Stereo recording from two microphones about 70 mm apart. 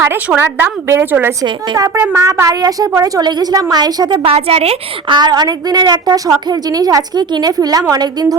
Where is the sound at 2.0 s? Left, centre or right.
Right.